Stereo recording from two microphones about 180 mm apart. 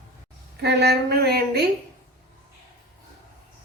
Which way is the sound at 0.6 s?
65° right (ahead or behind).